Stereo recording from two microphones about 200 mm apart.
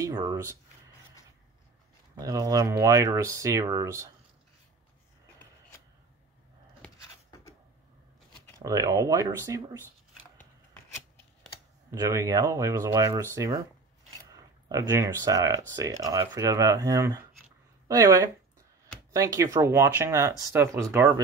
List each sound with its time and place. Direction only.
0.0 s speech: 20° right (ahead or behind)
2.1 s speech: 20° right (ahead or behind)
7.2 s a sound: 15° left (ahead or behind)
8.5 s speech: 15° right (ahead or behind)
10.3 s a sound: 10° left (ahead or behind)
11.9 s speech: 15° right (ahead or behind)